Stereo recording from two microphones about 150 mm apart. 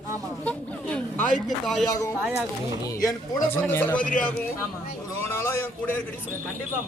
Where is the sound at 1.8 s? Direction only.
20° left (ahead or behind).